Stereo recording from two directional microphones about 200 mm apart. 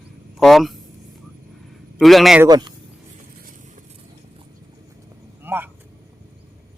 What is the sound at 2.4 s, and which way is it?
Speech, 20° right (ahead or behind).